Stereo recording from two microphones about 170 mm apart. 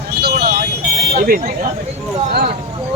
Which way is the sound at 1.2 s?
55° right (ahead or behind).